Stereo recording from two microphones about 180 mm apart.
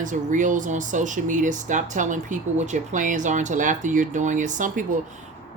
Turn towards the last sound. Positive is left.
turn(degrees=-45)  # may be behind; listen again after turning